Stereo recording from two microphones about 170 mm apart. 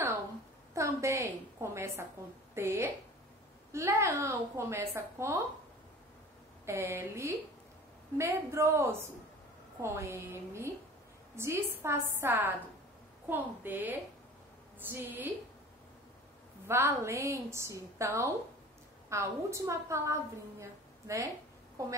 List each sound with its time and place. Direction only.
0.7 s a woman's voice: 15° right (ahead or behind)
6.6 s a woman's voice: 15° right (ahead or behind)
16.6 s a woman's voice: 15° right (ahead or behind)